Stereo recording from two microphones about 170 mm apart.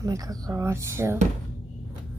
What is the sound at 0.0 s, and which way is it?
Speech, 20° right (ahead or behind).